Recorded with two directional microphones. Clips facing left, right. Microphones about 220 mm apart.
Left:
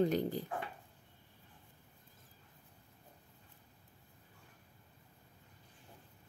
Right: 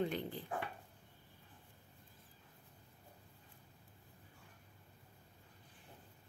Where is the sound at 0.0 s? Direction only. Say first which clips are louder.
Left 7 dB; 40° left (ahead or behind).